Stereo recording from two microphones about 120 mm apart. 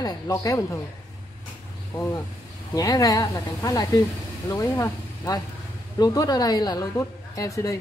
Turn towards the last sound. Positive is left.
turn(degrees=25)  # may be behind; listen again after turning